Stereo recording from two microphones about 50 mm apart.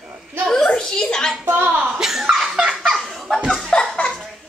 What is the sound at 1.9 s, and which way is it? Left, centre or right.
Speech, centre.